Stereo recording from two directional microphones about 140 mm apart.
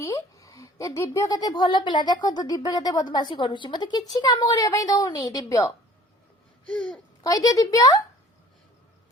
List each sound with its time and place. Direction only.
0.0 s a child's voice: 20° left (ahead or behind)
6.7 s speech: 10° left (ahead or behind)
7.3 s a child's voice: 25° left (ahead or behind)